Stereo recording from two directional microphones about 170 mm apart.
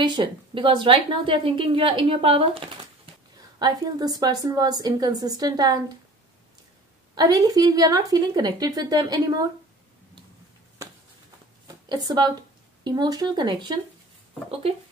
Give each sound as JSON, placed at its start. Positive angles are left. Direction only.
{"t": 0.0, "sound": "a woman's voice", "side_deg": -25}
{"t": 7.2, "sound": "a woman's voice", "side_deg": -25}
{"t": 11.6, "sound": "speech", "side_deg": -25}